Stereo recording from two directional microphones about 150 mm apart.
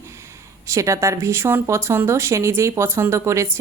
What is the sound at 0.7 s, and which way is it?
A woman's voice, 20° right (ahead or behind).